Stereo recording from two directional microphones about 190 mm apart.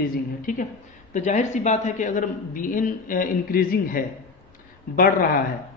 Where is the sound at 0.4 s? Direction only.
45° left (ahead or behind).